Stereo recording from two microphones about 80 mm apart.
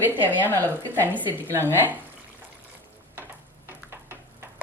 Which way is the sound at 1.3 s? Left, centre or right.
Right.